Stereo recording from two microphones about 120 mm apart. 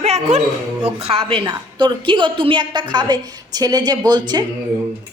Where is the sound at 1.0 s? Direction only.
50° right (ahead or behind); by 4.4 s 35° right (ahead or behind).